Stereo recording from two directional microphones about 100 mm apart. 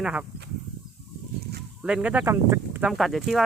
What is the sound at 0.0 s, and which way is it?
Speech, 10° right (ahead or behind).